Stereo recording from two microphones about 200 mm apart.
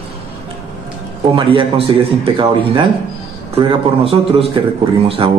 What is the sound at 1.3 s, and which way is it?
A man's voice, 25° right (ahead or behind).